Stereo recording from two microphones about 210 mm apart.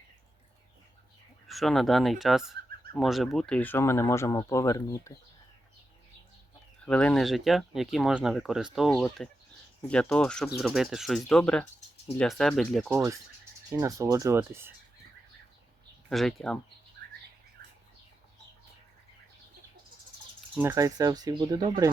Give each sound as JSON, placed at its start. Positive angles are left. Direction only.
{"t": 1.5, "sound": "speech", "side_deg": 0}
{"t": 6.8, "sound": "speech", "side_deg": 5}
{"t": 12.9, "sound": "speech", "side_deg": -10}
{"t": 16.0, "sound": "speech", "side_deg": 0}
{"t": 20.6, "sound": "speech", "side_deg": -10}